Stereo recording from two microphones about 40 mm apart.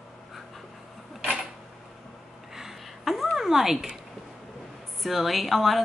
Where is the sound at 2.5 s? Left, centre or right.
Centre.